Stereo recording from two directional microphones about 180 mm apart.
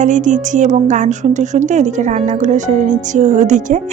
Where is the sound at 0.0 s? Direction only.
45° right (ahead or behind).